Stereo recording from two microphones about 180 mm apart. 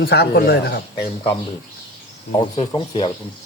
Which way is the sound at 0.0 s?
65° left (ahead or behind).